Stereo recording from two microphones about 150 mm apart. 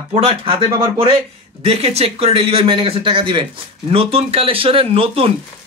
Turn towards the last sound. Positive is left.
turn(degrees=-40)  # may be behind; listen again after turning